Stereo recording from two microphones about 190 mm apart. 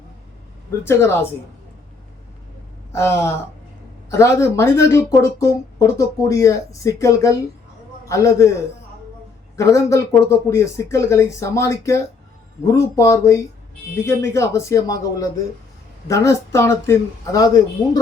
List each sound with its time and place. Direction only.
0.9 s speech: 15° left (ahead or behind)
2.9 s speech: 15° left (ahead or behind)
9.6 s speech: 15° left (ahead or behind)
16.0 s speech: 15° left (ahead or behind)